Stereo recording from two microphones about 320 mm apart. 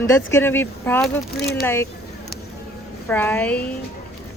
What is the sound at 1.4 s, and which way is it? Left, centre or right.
Speech, left.